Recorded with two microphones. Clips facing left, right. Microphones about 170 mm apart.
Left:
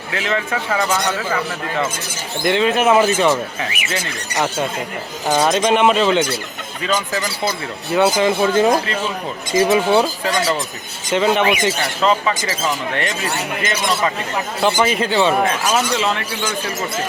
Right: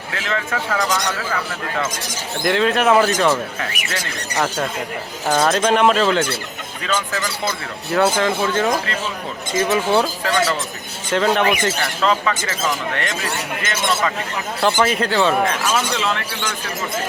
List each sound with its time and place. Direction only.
0.1 s speech: 5° left (ahead or behind)
2.4 s speech: 5° left (ahead or behind)
9.5 s speech: 30° left (ahead or behind)
9.9 s speech: 10° left (ahead or behind)
14.6 s speech: 10° left (ahead or behind)